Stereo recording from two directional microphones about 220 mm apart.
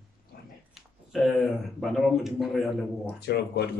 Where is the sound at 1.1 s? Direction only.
Centre (ahead or behind).